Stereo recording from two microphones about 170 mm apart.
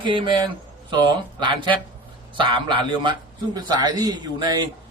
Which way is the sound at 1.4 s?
30° right (ahead or behind).